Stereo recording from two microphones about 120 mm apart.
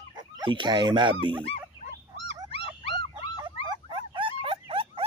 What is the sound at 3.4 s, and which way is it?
Dog, 40° right (ahead or behind).